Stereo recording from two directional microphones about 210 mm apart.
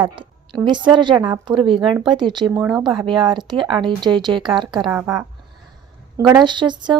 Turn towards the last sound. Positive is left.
turn(degrees=-20)  # may be behind; listen again after turning